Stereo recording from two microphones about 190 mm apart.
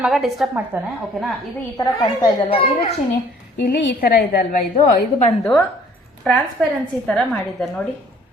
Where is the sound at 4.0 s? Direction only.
50° left (ahead or behind).